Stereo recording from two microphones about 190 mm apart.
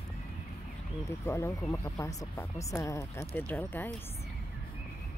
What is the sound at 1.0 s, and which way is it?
Speech, 15° left (ahead or behind).